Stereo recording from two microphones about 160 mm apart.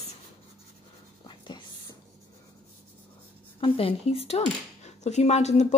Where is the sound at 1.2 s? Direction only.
30° left (ahead or behind).